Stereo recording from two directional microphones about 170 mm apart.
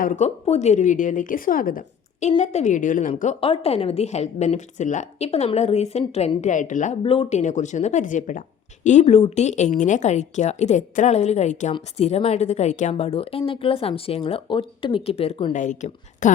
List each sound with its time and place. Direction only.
0.0 s speech: 50° left (ahead or behind)
0.4 s speech: 40° left (ahead or behind); by 1.8 s 55° left (ahead or behind)
2.4 s speech: 40° left (ahead or behind)
3.4 s a woman's voice: 35° left (ahead or behind)
7.0 s a woman's voice: 30° left (ahead or behind)
15.5 s speech: 45° left (ahead or behind)